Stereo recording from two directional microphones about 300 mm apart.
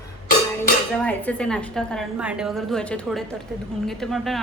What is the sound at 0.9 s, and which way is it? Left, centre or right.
A woman's voice, centre.